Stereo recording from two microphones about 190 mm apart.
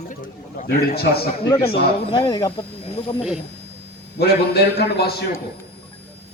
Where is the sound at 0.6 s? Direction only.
55° left (ahead or behind).